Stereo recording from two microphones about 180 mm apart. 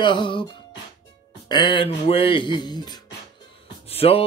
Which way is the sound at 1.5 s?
25° left (ahead or behind).